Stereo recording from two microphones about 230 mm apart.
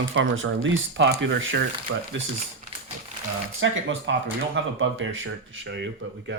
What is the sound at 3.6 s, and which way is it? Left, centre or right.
Speech, right.